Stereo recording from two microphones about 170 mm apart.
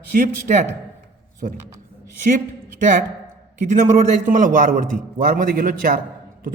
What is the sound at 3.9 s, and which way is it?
A man's voice, 50° right (ahead or behind).